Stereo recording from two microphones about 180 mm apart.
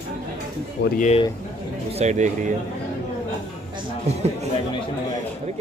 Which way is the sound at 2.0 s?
40° right (ahead or behind).